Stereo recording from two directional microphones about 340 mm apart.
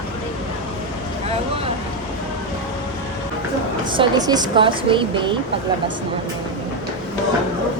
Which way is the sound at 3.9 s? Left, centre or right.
Centre.